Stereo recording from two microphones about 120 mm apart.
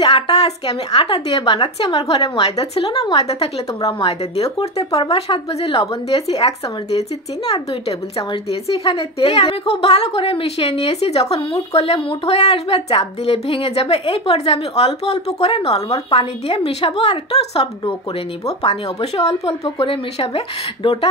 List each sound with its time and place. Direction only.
0.0 s a woman's voice: 55° left (ahead or behind)
2.0 s a woman's voice: 55° left (ahead or behind)
8.2 s a woman's voice: 50° left (ahead or behind)